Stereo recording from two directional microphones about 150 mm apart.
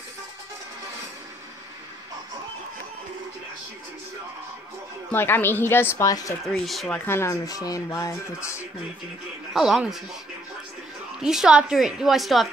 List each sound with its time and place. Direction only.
5.1 s speech: 15° left (ahead or behind)
6.4 s a woman's voice: centre (ahead or behind)
7.1 s speech: 20° left (ahead or behind)
9.5 s a woman's voice: centre (ahead or behind)
11.1 s a woman's voice: 5° right (ahead or behind)